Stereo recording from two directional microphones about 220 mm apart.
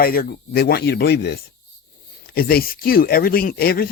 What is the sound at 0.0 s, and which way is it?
Speech, 45° left (ahead or behind).